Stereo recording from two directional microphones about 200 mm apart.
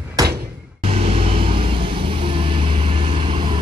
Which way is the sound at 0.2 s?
15° right (ahead or behind).